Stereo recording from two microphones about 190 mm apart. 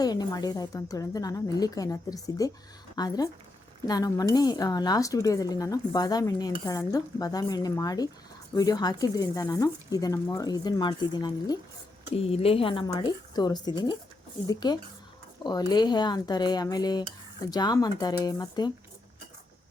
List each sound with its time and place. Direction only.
0.0 s speech: 20° left (ahead or behind)